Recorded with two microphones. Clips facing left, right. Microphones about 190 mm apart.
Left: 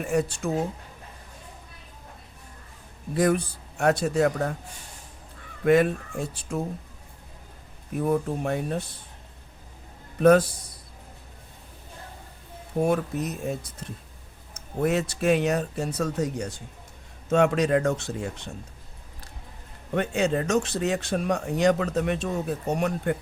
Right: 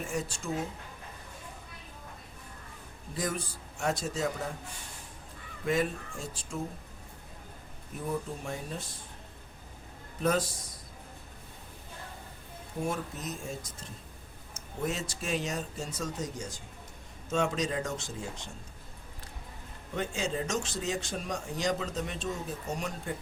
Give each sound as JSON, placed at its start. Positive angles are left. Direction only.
{"t": 0.1, "sound": "speech", "side_deg": 65}
{"t": 3.2, "sound": "speech", "side_deg": 65}
{"t": 5.6, "sound": "speech", "side_deg": 65}
{"t": 7.9, "sound": "speech", "side_deg": 60}
{"t": 10.2, "sound": "speech", "side_deg": 65}
{"t": 12.8, "sound": "speech", "side_deg": 65}
{"t": 19.9, "sound": "speech", "side_deg": 65}